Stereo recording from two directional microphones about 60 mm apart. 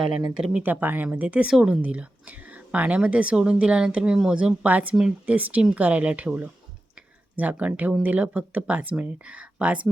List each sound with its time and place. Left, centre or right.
0.0 s speech: centre
0.6 s a woman's voice: right
6.9 s a sound: right
8.0 s a woman's voice: right